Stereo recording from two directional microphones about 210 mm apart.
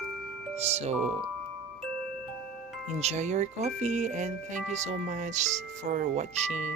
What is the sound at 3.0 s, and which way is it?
Speech, 30° right (ahead or behind).